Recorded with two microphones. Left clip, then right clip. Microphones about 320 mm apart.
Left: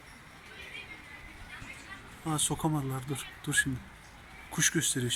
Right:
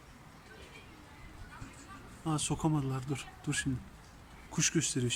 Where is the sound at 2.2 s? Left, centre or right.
Centre.